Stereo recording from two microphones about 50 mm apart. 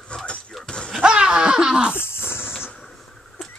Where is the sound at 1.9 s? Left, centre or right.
Left.